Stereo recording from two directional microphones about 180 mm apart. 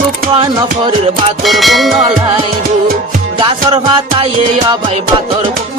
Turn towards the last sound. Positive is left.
turn(degrees=-25)  # may be behind; listen again after turning